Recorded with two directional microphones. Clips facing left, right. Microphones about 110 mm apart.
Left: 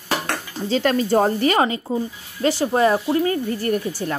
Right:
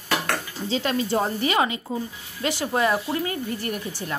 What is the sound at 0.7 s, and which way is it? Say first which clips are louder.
Speech: left 6 dB; 50° left (ahead or behind).